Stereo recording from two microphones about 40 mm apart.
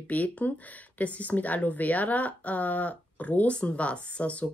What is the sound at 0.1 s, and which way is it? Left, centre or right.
A woman's voice, left.